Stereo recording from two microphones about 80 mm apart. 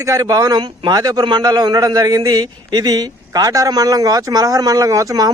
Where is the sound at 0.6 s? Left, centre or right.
Right.